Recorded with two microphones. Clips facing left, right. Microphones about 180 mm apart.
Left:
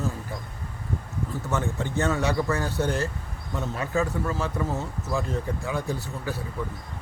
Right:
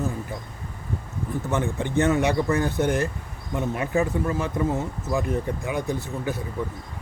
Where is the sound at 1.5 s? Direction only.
15° right (ahead or behind).